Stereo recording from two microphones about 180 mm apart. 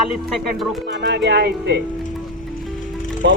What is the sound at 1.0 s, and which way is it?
Speech, 75° right (ahead or behind).